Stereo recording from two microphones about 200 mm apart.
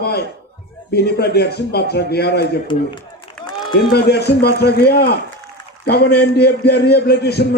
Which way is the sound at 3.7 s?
55° left (ahead or behind).